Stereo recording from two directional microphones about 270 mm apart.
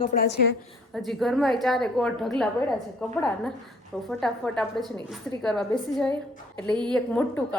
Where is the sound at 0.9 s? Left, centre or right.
Centre.